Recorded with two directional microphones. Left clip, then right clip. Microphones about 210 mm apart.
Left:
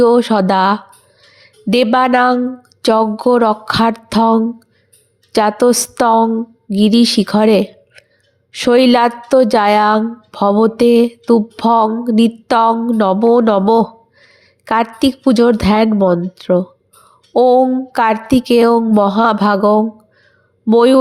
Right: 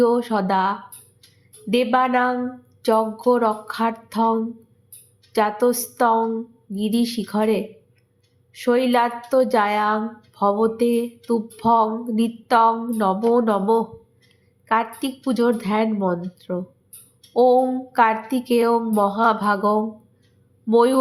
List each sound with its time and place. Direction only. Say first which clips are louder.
0.0 s a woman's voice: left 8 dB; 35° left (ahead or behind)